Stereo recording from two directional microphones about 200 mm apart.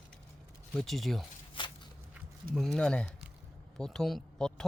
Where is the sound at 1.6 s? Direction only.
25° left (ahead or behind).